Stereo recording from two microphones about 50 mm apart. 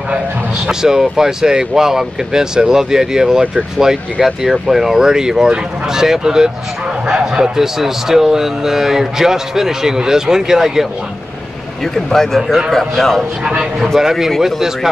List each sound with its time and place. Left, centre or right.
0.7 s a man's voice: centre
7.6 s speech: centre
11.8 s speech: centre
12.7 s speech: centre
13.4 s speech: centre